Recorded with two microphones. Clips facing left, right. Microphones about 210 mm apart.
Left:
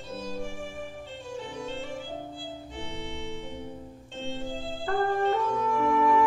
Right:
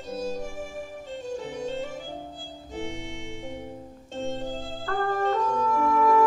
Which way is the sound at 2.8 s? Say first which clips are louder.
Right 4 dB; 45° right (ahead or behind).